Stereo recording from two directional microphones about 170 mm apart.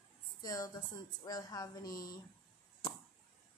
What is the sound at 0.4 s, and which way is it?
Speech, 20° left (ahead or behind).